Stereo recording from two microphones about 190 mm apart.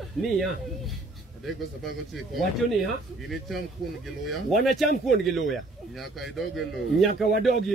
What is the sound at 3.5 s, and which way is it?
Speech, centre (ahead or behind).